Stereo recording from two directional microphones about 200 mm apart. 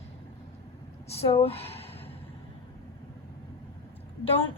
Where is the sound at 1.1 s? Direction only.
30° left (ahead or behind).